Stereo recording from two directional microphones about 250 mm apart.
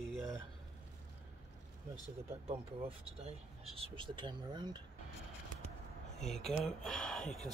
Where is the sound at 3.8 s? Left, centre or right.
Right.